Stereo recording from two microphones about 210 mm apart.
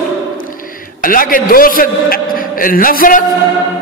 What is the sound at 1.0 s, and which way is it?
A man's voice, 40° left (ahead or behind).